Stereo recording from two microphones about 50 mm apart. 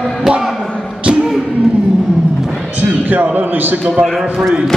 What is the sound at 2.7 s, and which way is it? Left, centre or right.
A man's voice, right.